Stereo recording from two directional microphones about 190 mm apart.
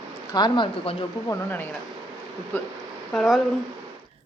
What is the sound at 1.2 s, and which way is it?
Speech, 10° left (ahead or behind).